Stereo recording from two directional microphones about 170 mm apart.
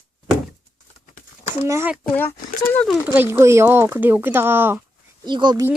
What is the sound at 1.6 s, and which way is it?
Speech, 15° right (ahead or behind).